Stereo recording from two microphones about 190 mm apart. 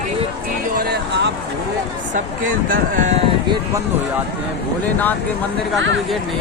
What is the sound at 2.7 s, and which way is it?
Speech, 40° right (ahead or behind).